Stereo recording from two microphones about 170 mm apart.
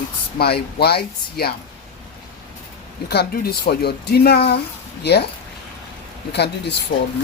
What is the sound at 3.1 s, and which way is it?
Speech, 70° left (ahead or behind).